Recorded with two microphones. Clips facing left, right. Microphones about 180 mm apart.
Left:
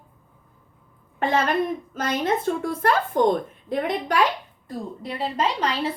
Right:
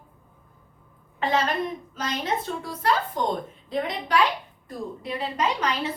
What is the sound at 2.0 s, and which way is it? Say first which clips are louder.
A woman's voice: left 4 dB; 50° left (ahead or behind).